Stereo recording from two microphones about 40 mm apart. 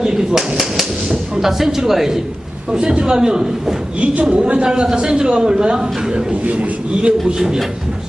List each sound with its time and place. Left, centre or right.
0.0 s a man's voice: centre
2.7 s a man's voice: right
4.1 s a woman's voice: right
6.4 s a man's voice: right
7.3 s a man's voice: centre